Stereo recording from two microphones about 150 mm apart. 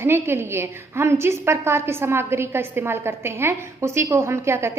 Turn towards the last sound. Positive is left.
turn(degrees=-15)  # may be behind; listen again after turning